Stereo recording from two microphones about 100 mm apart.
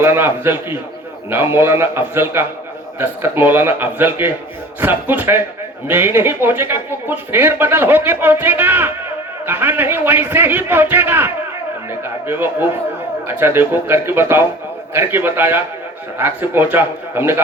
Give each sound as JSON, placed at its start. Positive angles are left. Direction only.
{"t": 0.0, "sound": "speech", "side_deg": -25}